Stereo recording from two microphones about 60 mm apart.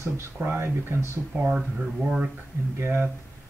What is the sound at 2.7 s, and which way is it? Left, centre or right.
Speech, right.